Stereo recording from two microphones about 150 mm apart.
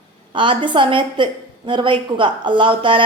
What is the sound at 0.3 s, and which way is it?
A woman's voice, 35° right (ahead or behind).